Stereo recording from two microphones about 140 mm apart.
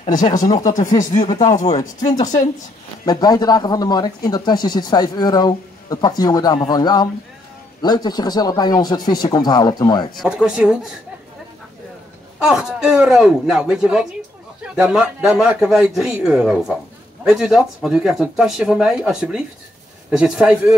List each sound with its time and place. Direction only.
0.1 s speech: 30° left (ahead or behind)
0.7 s speech: 70° left (ahead or behind)
1.2 s speech: 30° left (ahead or behind)
10.1 s speech: 5° right (ahead or behind)
12.4 s speech: 5° right (ahead or behind)